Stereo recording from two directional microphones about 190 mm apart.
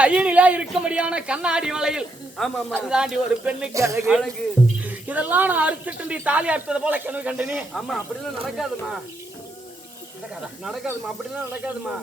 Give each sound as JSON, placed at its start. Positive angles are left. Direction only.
{"t": 0.0, "sound": "speech", "side_deg": -5}
{"t": 3.8, "sound": "speech", "side_deg": -15}
{"t": 4.0, "sound": "speech", "side_deg": 0}
{"t": 10.6, "sound": "speech", "side_deg": 0}